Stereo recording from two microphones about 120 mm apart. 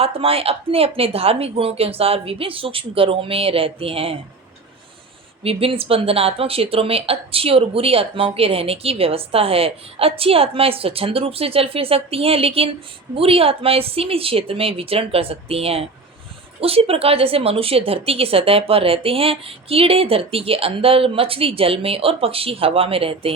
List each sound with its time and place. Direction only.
0.0 s speech: 55° right (ahead or behind)
5.4 s speech: 55° right (ahead or behind)